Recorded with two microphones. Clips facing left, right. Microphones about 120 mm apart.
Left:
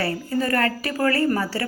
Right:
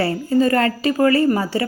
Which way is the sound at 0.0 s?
20° right (ahead or behind).